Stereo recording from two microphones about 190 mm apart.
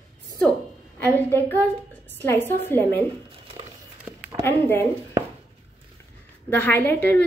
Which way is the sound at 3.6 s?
30° right (ahead or behind).